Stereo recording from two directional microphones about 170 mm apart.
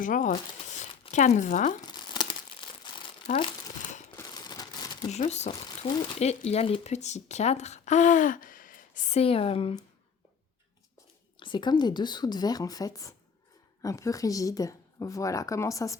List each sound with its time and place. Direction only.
0.0 s speech: 50° left (ahead or behind)
1.8 s crumpling: 25° left (ahead or behind)
3.2 s speech: 35° left (ahead or behind)
4.2 s crumpling: 25° left (ahead or behind)
5.0 s speech: 40° left (ahead or behind)
11.3 s speech: 30° left (ahead or behind)